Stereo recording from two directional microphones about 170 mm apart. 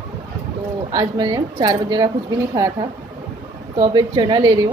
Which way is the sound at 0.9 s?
25° right (ahead or behind).